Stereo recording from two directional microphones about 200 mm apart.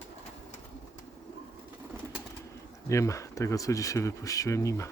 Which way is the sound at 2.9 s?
15° left (ahead or behind).